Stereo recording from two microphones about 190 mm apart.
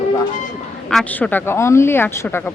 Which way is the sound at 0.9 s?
5° left (ahead or behind).